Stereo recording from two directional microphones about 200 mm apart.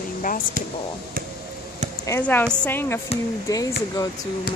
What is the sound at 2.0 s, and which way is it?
Speech, 10° left (ahead or behind).